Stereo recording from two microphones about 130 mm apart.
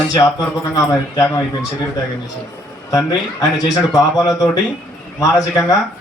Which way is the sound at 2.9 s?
25° left (ahead or behind).